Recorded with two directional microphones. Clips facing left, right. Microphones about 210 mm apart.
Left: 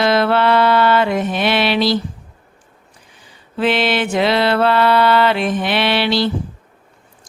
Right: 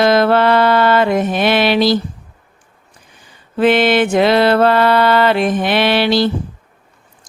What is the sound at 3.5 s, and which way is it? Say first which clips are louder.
Music: right 5 dB; 50° right (ahead or behind).